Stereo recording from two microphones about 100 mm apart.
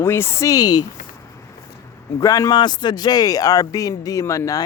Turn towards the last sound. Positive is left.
turn(degrees=35)  # may be behind; listen again after turning